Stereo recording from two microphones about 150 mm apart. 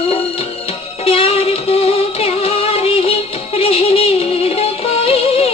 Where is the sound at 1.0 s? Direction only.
40° left (ahead or behind).